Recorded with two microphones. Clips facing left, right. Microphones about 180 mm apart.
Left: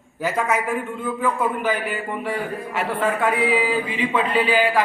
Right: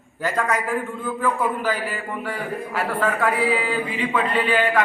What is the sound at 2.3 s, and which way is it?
Speech, 25° left (ahead or behind).